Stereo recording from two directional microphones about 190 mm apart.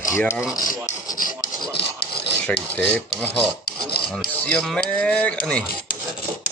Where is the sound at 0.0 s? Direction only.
15° left (ahead or behind).